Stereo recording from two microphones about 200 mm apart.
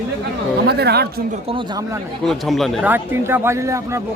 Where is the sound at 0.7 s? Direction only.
55° right (ahead or behind).